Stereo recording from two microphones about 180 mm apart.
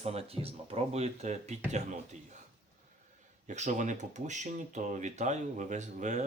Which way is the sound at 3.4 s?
40° right (ahead or behind).